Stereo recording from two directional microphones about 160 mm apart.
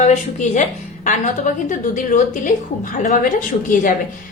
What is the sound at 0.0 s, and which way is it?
A woman's voice, 50° left (ahead or behind).